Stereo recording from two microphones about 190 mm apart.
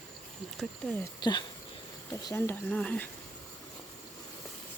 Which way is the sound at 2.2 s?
10° left (ahead or behind).